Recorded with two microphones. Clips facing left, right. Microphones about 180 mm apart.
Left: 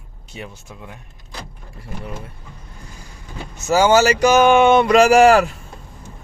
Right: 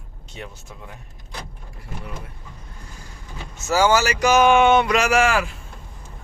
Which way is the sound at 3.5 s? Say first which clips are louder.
Left 4 dB; 20° left (ahead or behind).